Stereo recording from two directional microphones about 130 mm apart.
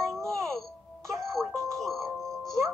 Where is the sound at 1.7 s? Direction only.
Centre (ahead or behind).